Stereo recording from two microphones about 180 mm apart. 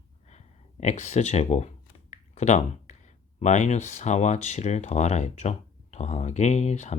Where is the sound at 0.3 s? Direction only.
40° left (ahead or behind).